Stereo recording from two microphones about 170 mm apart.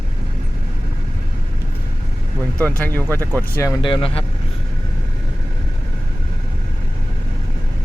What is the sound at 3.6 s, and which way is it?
Speech, 25° left (ahead or behind).